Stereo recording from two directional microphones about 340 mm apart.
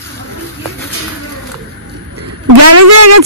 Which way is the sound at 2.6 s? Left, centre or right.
Right.